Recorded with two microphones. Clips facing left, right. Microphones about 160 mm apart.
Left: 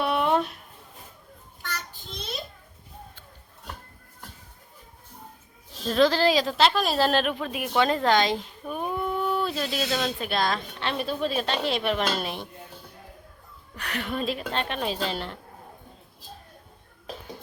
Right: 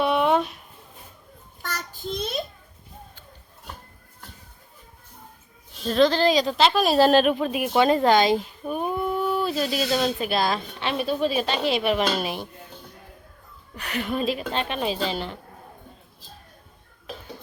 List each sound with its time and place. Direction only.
0.0 s a sound: centre (ahead or behind)
1.6 s child singing: 45° right (ahead or behind)
5.8 s a woman's voice: centre (ahead or behind)
6.8 s a woman's voice: 15° right (ahead or behind)
13.7 s a woman's voice: centre (ahead or behind)